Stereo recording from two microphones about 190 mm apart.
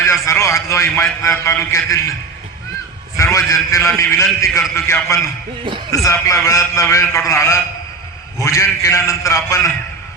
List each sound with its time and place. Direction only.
0.0 s a man's voice: 15° left (ahead or behind)
3.3 s a man's voice: 15° left (ahead or behind)